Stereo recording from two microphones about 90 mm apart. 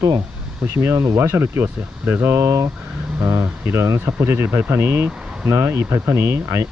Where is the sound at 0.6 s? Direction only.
30° right (ahead or behind).